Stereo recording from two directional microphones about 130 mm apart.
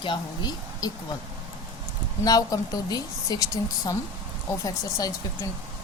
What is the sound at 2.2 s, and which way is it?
A woman's voice, 30° left (ahead or behind).